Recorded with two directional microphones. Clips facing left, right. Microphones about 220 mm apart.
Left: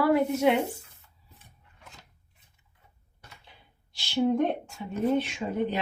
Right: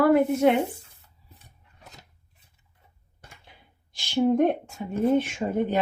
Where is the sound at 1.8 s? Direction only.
40° right (ahead or behind).